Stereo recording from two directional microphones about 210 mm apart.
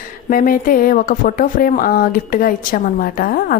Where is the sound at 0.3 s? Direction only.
40° left (ahead or behind).